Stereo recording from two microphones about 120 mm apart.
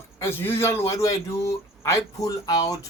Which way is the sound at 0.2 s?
20° left (ahead or behind).